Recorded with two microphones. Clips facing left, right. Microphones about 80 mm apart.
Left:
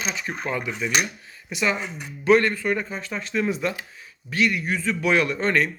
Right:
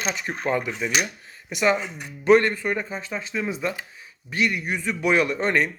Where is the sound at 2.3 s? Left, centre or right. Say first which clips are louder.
Right 1 dB; right.